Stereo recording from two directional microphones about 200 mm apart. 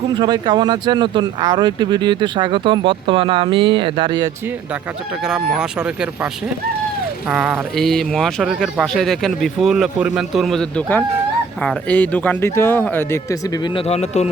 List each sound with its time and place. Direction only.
0.2 s speech: 20° right (ahead or behind)
5.2 s speech: 5° right (ahead or behind)
7.3 s a man's voice: 5° right (ahead or behind); by 13.6 s 10° left (ahead or behind)
13.6 s speech: 30° left (ahead or behind)